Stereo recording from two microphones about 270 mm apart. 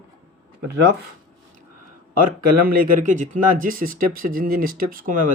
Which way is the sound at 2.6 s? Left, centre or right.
Right.